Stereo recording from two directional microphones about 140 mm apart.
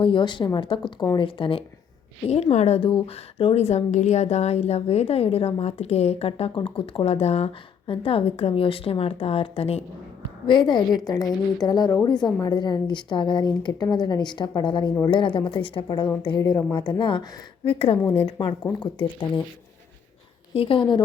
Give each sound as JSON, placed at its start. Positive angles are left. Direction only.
{"t": 0.0, "sound": "a woman's voice", "side_deg": 35}
{"t": 2.3, "sound": "a woman's voice", "side_deg": 50}
{"t": 20.6, "sound": "a woman's voice", "side_deg": 40}